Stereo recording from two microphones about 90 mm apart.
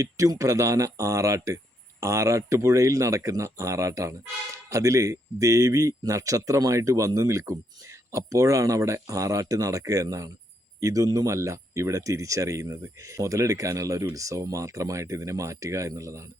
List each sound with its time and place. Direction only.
0.0 s speech: 40° right (ahead or behind)